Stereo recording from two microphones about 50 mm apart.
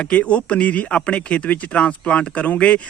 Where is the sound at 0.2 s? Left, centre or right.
Left.